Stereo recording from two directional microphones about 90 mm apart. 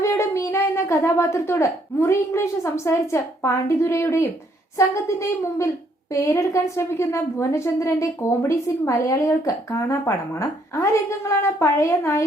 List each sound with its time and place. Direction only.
0.0 s a child's voice: 30° left (ahead or behind)